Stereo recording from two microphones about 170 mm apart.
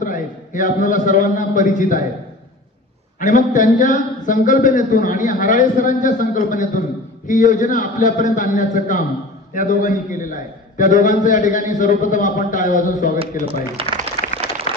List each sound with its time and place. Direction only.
0.0 s a man's voice: 50° left (ahead or behind)
3.2 s a man's voice: 50° left (ahead or behind)
14.2 s a sound: 50° left (ahead or behind)